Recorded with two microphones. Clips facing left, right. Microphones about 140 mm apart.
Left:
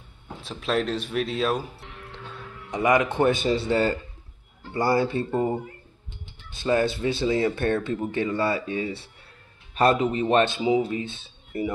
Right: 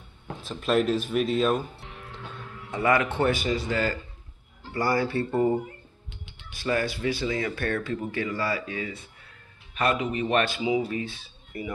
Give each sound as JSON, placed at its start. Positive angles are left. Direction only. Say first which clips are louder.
{"t": 0.4, "sound": "speech", "louder": "right 2 dB", "side_deg": 0}
{"t": 2.7, "sound": "speech", "louder": "left 2 dB", "side_deg": 15}
{"t": 6.5, "sound": "a man's voice", "louder": "left 4 dB", "side_deg": 25}